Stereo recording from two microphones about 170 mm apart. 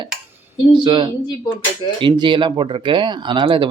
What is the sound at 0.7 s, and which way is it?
Speech, 30° right (ahead or behind).